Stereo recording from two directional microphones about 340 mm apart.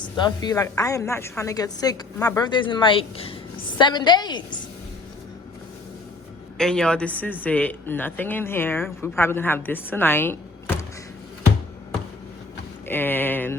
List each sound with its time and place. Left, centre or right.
0.3 s a woman's voice: centre
6.6 s speech: centre
12.9 s speech: centre